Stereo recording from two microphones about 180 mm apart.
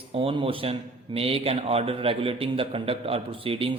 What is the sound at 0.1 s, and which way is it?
Speech, 30° right (ahead or behind).